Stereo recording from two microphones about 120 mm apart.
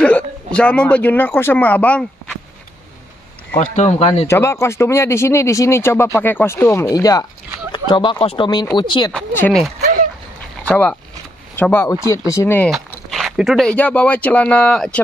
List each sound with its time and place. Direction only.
0.0 s speech: 10° left (ahead or behind)
3.7 s speech: 70° left (ahead or behind)
4.3 s speech: 20° left (ahead or behind)
7.7 s speech: 40° left (ahead or behind)
10.6 s speech: 10° left (ahead or behind)
13.1 s speech: 5° right (ahead or behind)